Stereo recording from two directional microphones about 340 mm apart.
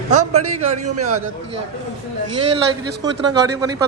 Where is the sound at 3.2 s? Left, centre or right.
Centre.